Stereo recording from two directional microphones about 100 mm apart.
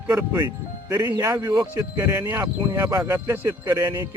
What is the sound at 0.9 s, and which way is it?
Speech, 35° right (ahead or behind).